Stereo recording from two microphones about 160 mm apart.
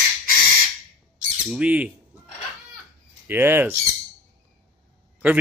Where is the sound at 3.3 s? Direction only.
15° right (ahead or behind).